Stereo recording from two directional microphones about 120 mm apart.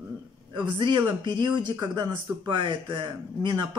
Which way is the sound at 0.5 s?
40° right (ahead or behind).